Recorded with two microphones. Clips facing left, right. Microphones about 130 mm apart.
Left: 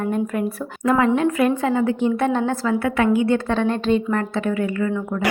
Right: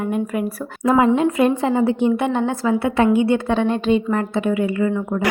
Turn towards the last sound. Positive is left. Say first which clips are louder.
# right 2 dB
turn(degrees=-15)  # may be behind; listen again after turning